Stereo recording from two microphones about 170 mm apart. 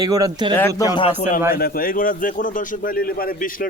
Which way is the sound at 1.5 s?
60° left (ahead or behind).